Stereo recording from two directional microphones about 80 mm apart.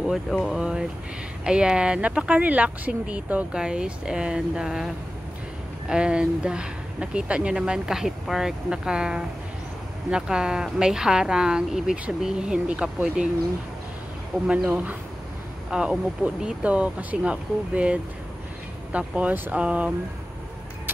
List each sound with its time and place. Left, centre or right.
0.0 s speech: centre
14.5 s speech: centre